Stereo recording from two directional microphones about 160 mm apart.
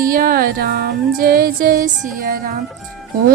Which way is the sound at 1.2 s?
65° right (ahead or behind).